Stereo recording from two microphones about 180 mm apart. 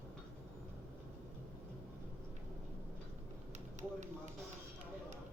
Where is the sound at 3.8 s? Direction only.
40° right (ahead or behind).